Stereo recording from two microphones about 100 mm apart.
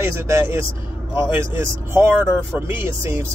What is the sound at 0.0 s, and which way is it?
Speech, 25° right (ahead or behind).